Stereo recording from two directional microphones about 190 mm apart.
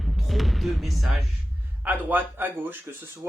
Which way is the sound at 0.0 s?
Centre (ahead or behind).